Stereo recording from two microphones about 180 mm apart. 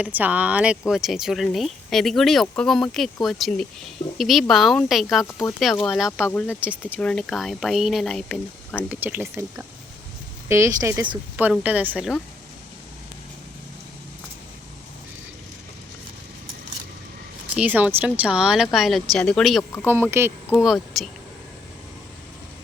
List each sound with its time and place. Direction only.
0.0 s speech: 10° right (ahead or behind)
6.2 s speech: 10° left (ahead or behind)
9.0 s speech: 10° right (ahead or behind)
17.6 s speech: 10° right (ahead or behind)
19.8 s speech: 15° right (ahead or behind)
20.6 s speech: centre (ahead or behind)